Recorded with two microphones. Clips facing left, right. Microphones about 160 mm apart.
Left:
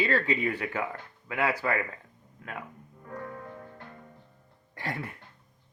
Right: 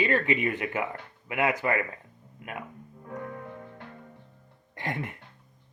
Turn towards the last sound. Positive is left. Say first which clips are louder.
# right 2 dB
turn(degrees=-20)  # may be behind; listen again after turning